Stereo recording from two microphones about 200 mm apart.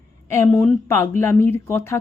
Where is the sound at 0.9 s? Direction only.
15° left (ahead or behind).